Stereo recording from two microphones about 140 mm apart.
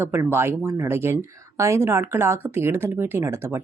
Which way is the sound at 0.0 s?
15° right (ahead or behind).